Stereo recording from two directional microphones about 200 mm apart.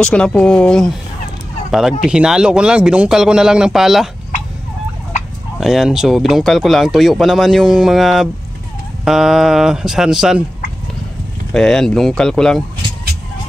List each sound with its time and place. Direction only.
0.0 s speech: 5° left (ahead or behind)
5.6 s speech: centre (ahead or behind)
11.5 s speech: centre (ahead or behind)